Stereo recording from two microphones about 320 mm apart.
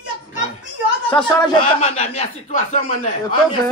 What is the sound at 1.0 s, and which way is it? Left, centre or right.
A man's voice, centre.